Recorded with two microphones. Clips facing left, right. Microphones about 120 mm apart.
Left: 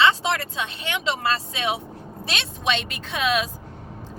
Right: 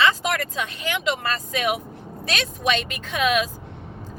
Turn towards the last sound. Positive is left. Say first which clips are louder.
# right 2 dB
turn(degrees=30)  # may be behind; listen again after turning